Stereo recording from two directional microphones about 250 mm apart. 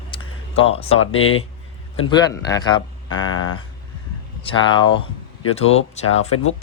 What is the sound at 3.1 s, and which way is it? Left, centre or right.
Speech, left.